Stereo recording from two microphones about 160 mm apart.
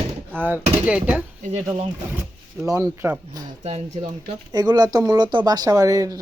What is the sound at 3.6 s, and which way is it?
Speech, 40° right (ahead or behind).